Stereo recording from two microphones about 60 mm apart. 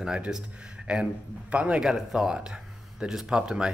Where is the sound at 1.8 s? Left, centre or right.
Centre.